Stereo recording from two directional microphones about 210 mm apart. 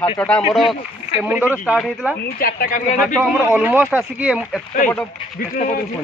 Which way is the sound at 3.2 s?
5° right (ahead or behind).